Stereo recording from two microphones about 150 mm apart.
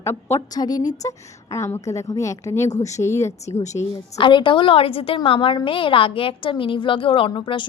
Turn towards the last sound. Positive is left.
turn(degrees=35)  # may be behind; listen again after turning